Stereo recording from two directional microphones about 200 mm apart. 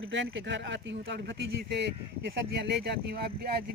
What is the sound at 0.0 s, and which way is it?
Speech, 65° right (ahead or behind).